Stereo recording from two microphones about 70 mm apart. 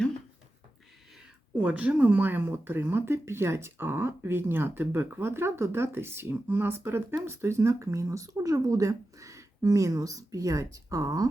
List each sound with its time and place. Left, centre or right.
1.6 s speech: right